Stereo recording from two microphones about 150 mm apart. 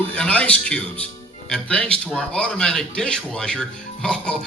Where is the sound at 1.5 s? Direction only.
5° left (ahead or behind).